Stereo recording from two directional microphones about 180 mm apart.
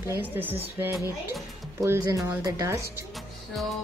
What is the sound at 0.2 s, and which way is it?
Speech, 10° right (ahead or behind).